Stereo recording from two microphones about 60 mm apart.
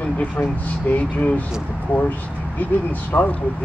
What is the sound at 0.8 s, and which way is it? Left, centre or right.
Speech, left.